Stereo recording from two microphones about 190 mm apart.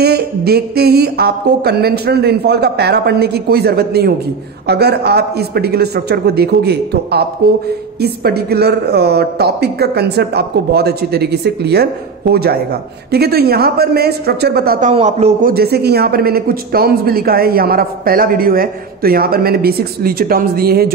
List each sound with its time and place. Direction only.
0.0 s a woman's voice: 55° right (ahead or behind)
14.9 s a man's voice: 35° right (ahead or behind)
15.5 s speech: 55° right (ahead or behind)